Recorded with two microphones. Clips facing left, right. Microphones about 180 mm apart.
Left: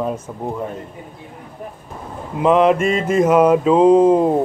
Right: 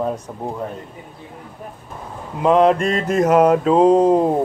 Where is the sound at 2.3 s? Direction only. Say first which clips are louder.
Even; centre (ahead or behind).